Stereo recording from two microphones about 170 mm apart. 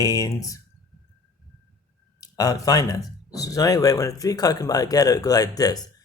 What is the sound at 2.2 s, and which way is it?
Speech, 20° left (ahead or behind).